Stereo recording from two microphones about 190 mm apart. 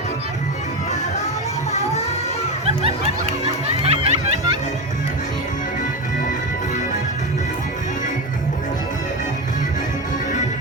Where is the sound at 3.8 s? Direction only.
30° right (ahead or behind).